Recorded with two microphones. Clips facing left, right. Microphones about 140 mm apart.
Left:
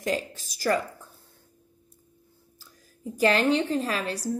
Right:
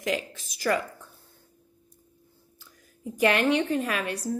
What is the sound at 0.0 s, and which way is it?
Speech, 35° left (ahead or behind).